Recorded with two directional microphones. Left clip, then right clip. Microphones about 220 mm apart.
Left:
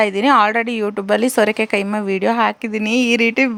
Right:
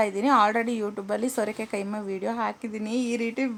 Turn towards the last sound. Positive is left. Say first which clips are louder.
# left 13 dB
turn(degrees=30)  # may be behind; listen again after turning